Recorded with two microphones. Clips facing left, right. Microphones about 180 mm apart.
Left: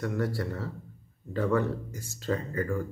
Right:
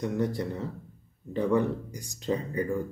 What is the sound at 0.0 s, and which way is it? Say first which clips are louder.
Speech: right 2 dB; 20° right (ahead or behind).